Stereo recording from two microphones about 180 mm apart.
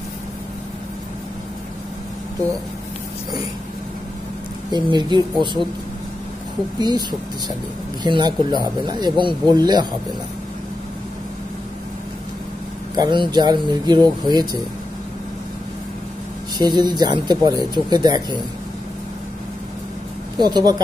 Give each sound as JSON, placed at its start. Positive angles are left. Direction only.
{"t": 4.6, "sound": "speech", "side_deg": -25}
{"t": 6.8, "sound": "speech", "side_deg": -25}
{"t": 12.9, "sound": "speech", "side_deg": -25}
{"t": 16.5, "sound": "speech", "side_deg": -25}
{"t": 20.3, "sound": "speech", "side_deg": -25}